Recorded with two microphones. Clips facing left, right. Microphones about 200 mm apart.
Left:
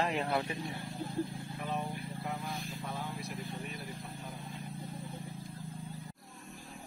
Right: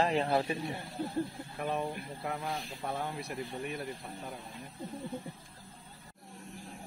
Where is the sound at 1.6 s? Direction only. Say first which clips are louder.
Right 4 dB; 55° right (ahead or behind).